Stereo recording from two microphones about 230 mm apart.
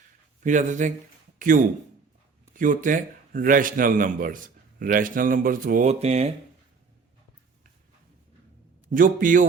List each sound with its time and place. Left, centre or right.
0.4 s a man's voice: right
8.9 s a man's voice: right